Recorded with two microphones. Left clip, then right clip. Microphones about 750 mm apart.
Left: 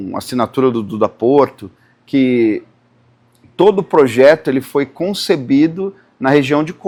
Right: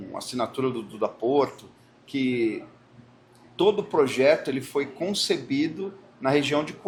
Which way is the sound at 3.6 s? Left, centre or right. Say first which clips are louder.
Left 11 dB; left.